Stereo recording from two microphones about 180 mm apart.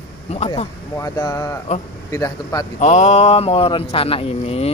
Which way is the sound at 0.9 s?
15° left (ahead or behind).